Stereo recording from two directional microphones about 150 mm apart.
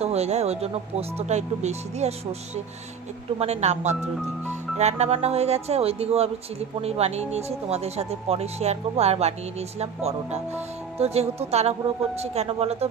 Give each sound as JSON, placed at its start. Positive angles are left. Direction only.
{"t": 0.0, "sound": "speech", "side_deg": -45}